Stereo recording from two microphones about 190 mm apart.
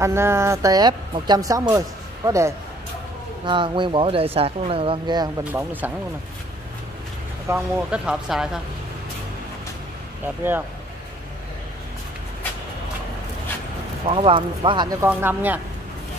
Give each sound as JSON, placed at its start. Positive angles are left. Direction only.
{"t": 0.0, "sound": "speech", "side_deg": -15}
{"t": 5.4, "sound": "speech", "side_deg": -10}
{"t": 7.4, "sound": "speech", "side_deg": -10}
{"t": 10.2, "sound": "speech", "side_deg": -10}
{"t": 14.0, "sound": "speech", "side_deg": -25}